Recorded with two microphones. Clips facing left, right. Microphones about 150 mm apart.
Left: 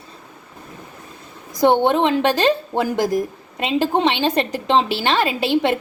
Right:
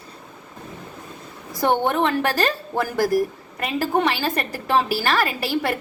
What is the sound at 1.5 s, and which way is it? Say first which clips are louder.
A woman's voice: left 5 dB; 15° left (ahead or behind).